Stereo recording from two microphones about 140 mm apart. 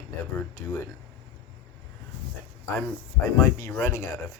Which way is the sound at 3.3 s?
20° left (ahead or behind).